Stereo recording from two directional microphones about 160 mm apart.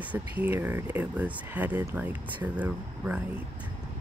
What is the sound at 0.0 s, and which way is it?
Speech, 10° right (ahead or behind).